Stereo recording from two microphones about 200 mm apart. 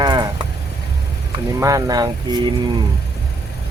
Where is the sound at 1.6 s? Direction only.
15° right (ahead or behind).